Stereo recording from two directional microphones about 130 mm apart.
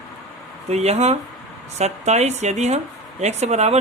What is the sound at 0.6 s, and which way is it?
Speech, 55° right (ahead or behind).